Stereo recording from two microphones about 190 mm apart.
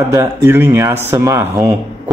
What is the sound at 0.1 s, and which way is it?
Speech, 15° right (ahead or behind).